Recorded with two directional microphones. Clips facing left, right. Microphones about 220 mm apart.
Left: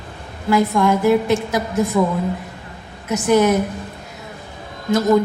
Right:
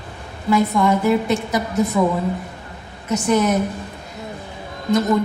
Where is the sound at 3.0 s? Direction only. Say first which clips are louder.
Left 3 dB; 5° left (ahead or behind).